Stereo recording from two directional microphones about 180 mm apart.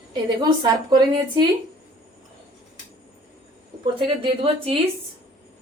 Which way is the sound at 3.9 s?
30° right (ahead or behind).